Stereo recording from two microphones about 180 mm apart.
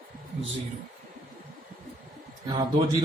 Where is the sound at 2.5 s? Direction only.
25° right (ahead or behind).